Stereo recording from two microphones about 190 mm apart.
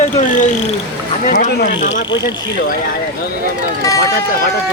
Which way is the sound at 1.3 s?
60° left (ahead or behind).